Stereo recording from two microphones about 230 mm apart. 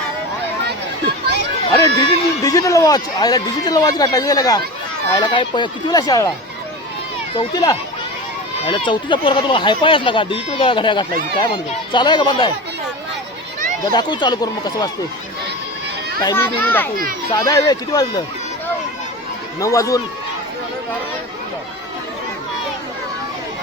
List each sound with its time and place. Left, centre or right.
2.0 s speech: centre
7.3 s speech: centre
13.9 s speech: centre
16.2 s speech: centre
19.5 s speech: centre